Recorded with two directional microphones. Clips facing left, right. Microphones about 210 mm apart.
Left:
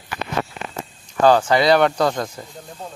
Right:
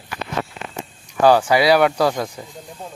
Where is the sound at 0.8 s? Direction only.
10° right (ahead or behind).